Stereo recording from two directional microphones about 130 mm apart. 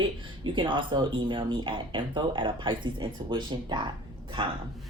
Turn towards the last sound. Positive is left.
turn(degrees=-40)  # may be behind; listen again after turning